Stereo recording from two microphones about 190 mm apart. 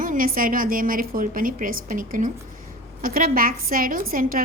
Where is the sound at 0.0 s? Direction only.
45° right (ahead or behind).